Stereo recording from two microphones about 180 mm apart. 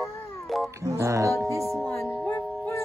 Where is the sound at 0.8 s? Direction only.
15° right (ahead or behind).